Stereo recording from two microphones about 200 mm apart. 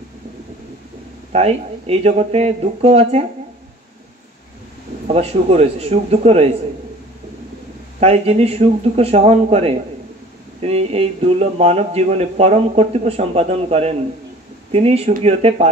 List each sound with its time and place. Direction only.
1.3 s speech: 30° right (ahead or behind)
5.0 s speech: 30° right (ahead or behind)
8.0 s speech: 30° right (ahead or behind)